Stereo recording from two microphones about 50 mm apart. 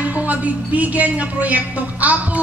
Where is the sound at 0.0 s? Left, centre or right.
Right.